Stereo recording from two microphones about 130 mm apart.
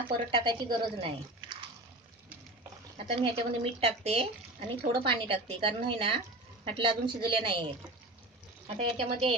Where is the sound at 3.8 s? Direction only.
50° right (ahead or behind).